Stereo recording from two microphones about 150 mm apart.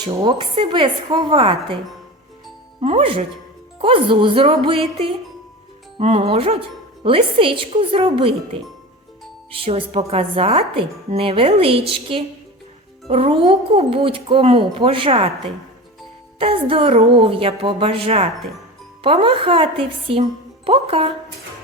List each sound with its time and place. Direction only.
0.2 s a woman's voice: 35° right (ahead or behind)
2.8 s a woman's voice: 40° right (ahead or behind)
6.0 s a woman's voice: 40° right (ahead or behind)